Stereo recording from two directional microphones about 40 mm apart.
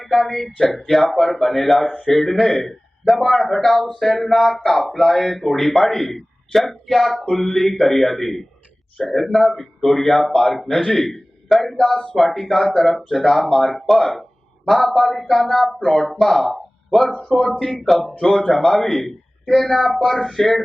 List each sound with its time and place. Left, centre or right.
0.0 s a man's voice: centre